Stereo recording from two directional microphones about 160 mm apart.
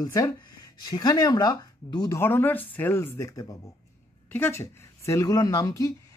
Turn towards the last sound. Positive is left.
turn(degrees=20)  # may be behind; listen again after turning